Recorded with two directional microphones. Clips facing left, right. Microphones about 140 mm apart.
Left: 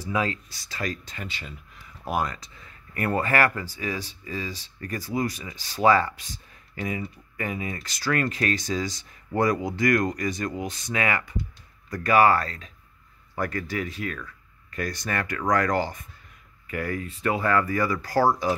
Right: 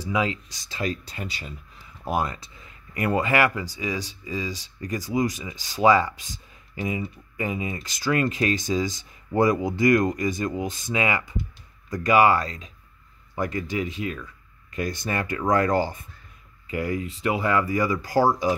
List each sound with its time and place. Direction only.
0.1 s speech: 15° right (ahead or behind)
1.0 s speech: 35° right (ahead or behind)
2.9 s speech: 15° right (ahead or behind)